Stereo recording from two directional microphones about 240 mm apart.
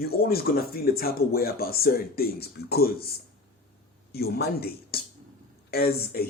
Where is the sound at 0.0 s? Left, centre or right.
Left.